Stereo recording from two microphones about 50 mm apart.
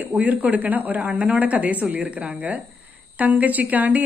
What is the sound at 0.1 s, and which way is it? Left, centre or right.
A woman's voice, right.